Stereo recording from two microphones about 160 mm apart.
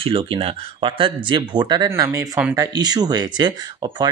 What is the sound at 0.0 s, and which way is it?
Speech, 35° right (ahead or behind).